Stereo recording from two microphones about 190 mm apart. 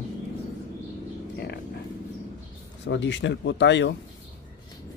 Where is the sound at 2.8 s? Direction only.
70° left (ahead or behind).